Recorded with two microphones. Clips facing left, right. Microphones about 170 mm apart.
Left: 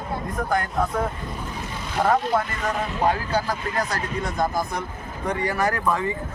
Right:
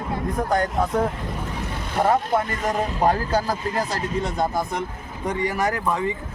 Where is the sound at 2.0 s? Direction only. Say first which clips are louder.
Right 1 dB; 20° right (ahead or behind).